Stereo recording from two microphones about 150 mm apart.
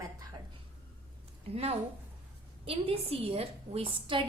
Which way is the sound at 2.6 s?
40° right (ahead or behind).